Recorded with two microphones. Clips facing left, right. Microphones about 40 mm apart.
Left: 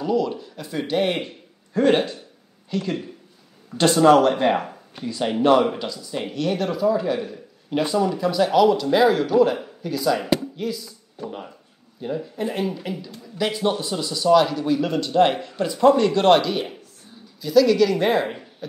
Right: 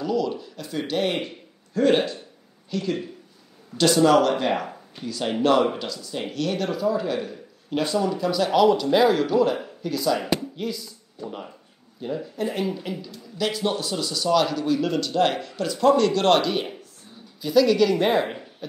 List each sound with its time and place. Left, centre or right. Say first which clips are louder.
0.0 s speech: left 2 dB; centre
1.2 s a man's voice: right 1 dB; left
3.7 s a man's voice: left 3 dB; left; by 7.3 s centre
7.7 s speech: left 2 dB; centre
11.2 s speech: left 1 dB; centre
12.4 s speech: even; centre
12.7 s speech: left 1 dB; centre
13.4 s a man's voice: left 2 dB; left
16.3 s speech: left 1 dB; centre
18.2 s a sound: left 1 dB; centre